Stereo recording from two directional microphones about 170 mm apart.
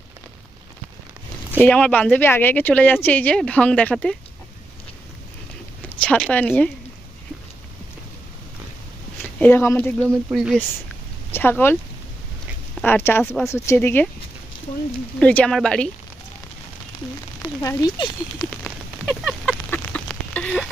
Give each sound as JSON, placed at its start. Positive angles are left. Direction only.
{"t": 1.6, "sound": "speech", "side_deg": 5}
{"t": 6.0, "sound": "speech", "side_deg": 5}
{"t": 9.4, "sound": "speech", "side_deg": 15}
{"t": 11.3, "sound": "speech", "side_deg": 15}
{"t": 12.8, "sound": "speech", "side_deg": 15}
{"t": 15.2, "sound": "speech", "side_deg": 10}
{"t": 17.4, "sound": "speech", "side_deg": 20}
{"t": 18.5, "sound": "a sound", "side_deg": 5}
{"t": 19.7, "sound": "duck", "side_deg": 10}